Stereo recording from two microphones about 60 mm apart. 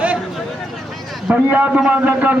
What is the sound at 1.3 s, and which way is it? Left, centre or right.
A man's voice, right.